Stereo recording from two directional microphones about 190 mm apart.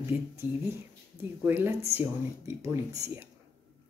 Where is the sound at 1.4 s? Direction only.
10° right (ahead or behind).